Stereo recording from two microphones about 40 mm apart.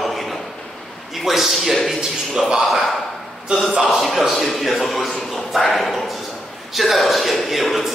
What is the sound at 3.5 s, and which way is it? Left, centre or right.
Speech, right.